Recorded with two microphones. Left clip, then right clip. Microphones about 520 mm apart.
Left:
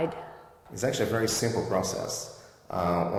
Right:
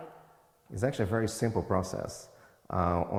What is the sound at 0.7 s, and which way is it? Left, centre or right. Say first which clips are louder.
Speech: left 3 dB; right.